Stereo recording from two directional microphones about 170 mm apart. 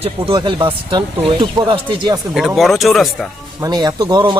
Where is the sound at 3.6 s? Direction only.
20° right (ahead or behind).